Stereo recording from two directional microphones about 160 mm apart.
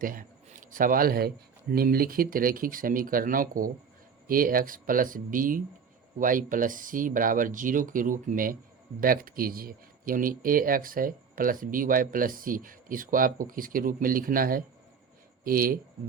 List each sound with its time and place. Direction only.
0.0 s a man's voice: 60° right (ahead or behind)